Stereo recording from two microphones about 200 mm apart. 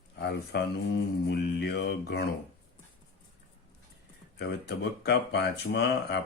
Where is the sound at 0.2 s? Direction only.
55° left (ahead or behind).